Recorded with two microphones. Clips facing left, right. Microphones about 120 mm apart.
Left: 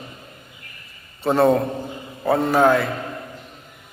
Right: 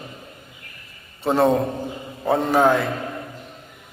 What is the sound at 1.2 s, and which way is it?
A man's voice, 15° right (ahead or behind).